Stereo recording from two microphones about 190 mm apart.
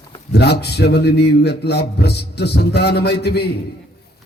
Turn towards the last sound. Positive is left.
turn(degrees=60)  # may be behind; listen again after turning